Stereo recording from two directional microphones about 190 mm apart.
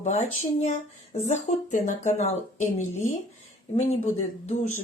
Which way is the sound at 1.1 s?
35° left (ahead or behind).